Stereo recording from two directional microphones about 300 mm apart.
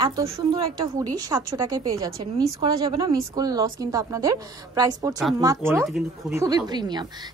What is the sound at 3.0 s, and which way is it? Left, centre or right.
Speech, centre.